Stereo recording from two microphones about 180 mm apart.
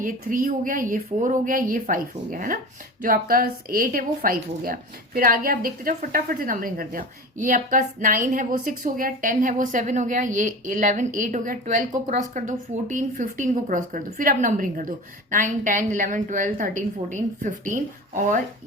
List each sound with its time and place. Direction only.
0.0 s a woman's voice: 50° right (ahead or behind)